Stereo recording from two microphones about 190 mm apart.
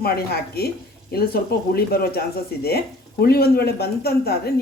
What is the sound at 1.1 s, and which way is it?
Speech, 55° left (ahead or behind).